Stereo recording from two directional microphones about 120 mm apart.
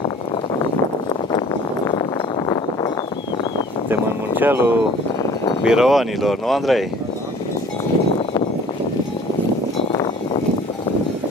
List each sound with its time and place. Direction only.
1.9 s a sound: 35° left (ahead or behind)
3.9 s speech: 15° right (ahead or behind)
5.6 s speech: 5° right (ahead or behind)